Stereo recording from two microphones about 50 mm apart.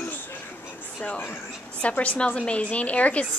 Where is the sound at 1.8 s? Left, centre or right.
Left.